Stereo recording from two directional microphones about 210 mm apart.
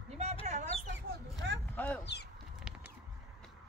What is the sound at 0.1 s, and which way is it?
Chicken, 30° right (ahead or behind).